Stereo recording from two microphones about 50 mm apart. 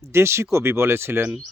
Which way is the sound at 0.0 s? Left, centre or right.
Right.